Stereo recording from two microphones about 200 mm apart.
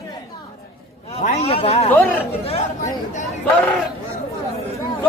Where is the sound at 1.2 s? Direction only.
30° left (ahead or behind).